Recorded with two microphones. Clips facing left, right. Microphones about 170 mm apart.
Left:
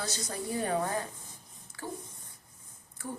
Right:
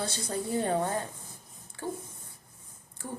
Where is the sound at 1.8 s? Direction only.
25° right (ahead or behind).